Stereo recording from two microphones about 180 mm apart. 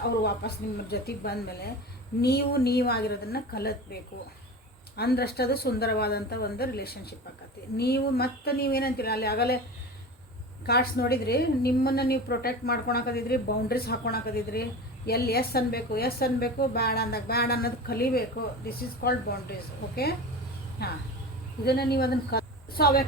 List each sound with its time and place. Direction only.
0.2 s a woman's voice: 60° left (ahead or behind)
4.9 s a woman's voice: 60° left (ahead or behind)
10.7 s a woman's voice: 60° left (ahead or behind)
20.8 s a woman's voice: 60° left (ahead or behind)